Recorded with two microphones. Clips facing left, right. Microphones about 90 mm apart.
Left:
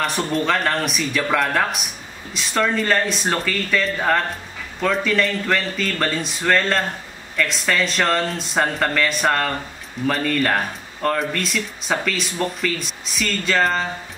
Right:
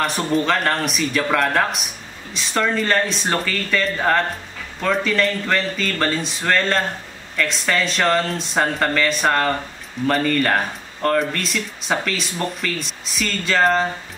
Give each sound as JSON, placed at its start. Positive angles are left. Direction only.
{"t": 0.0, "sound": "speech", "side_deg": 0}